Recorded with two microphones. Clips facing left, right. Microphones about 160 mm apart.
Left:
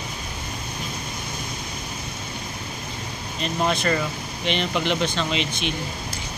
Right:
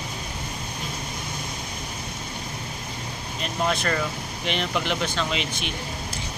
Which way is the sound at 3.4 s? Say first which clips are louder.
Left 2 dB; centre (ahead or behind).